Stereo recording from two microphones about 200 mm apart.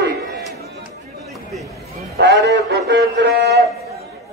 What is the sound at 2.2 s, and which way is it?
A man's voice, 55° right (ahead or behind).